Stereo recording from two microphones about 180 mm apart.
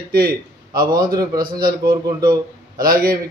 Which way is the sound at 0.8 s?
25° right (ahead or behind).